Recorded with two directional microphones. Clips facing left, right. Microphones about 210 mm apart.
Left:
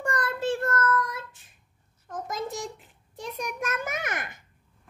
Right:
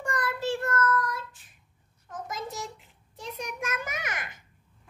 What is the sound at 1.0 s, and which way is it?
Child singing, 25° left (ahead or behind).